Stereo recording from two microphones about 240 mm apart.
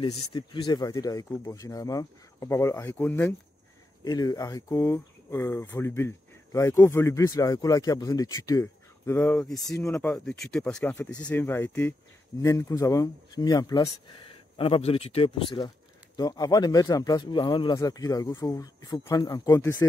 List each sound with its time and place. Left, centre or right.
0.0 s speech: centre